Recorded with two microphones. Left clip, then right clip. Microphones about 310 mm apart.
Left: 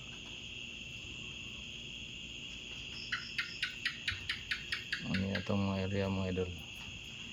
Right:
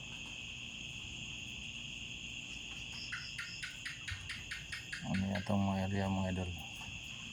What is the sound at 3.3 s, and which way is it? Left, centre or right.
Insect, left.